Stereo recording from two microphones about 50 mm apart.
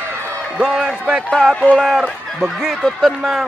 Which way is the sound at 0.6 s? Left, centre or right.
Right.